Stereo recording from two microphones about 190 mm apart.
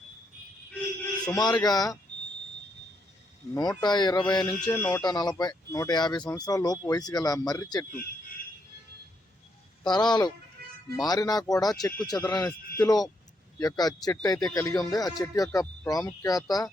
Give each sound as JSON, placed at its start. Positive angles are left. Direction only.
{"t": 1.2, "sound": "speech", "side_deg": 20}
{"t": 3.5, "sound": "speech", "side_deg": 20}
{"t": 5.0, "sound": "speech", "side_deg": 20}
{"t": 9.9, "sound": "speech", "side_deg": 20}
{"t": 10.6, "sound": "music", "side_deg": -55}
{"t": 10.9, "sound": "speech", "side_deg": 20}